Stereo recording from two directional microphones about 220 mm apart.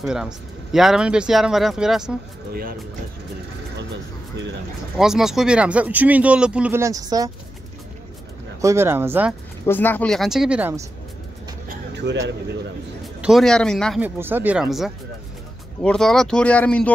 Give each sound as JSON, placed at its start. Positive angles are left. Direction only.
{"t": 0.0, "sound": "speech", "side_deg": 0}
{"t": 4.9, "sound": "speech", "side_deg": 0}
{"t": 8.5, "sound": "speech", "side_deg": -10}
{"t": 9.7, "sound": "speech", "side_deg": 10}
{"t": 11.9, "sound": "speech", "side_deg": -50}
{"t": 13.0, "sound": "a man's voice", "side_deg": 0}
{"t": 14.0, "sound": "speech", "side_deg": -10}